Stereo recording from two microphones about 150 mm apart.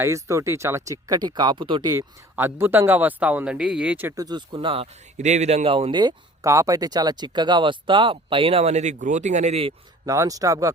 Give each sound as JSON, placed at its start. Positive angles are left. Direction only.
{"t": 0.0, "sound": "a man's voice", "side_deg": -20}
{"t": 2.3, "sound": "a man's voice", "side_deg": -15}
{"t": 10.1, "sound": "a man's voice", "side_deg": -20}